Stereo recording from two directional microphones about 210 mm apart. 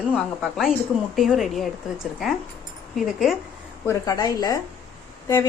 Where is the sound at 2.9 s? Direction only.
Centre (ahead or behind).